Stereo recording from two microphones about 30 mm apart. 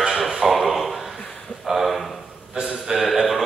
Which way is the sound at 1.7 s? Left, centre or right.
Right.